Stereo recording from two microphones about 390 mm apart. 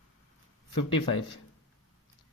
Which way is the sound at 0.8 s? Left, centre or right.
Left.